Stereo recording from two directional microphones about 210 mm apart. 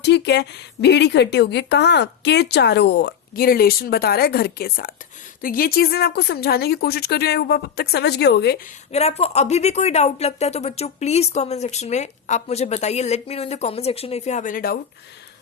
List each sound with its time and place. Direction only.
0.0 s speech: 55° left (ahead or behind)
8.9 s speech: 30° left (ahead or behind)